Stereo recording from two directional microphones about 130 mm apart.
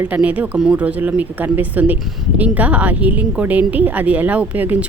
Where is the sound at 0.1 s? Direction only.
10° right (ahead or behind).